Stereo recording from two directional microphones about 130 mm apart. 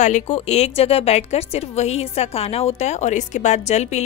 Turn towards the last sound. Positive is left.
turn(degrees=60)  # may be behind; listen again after turning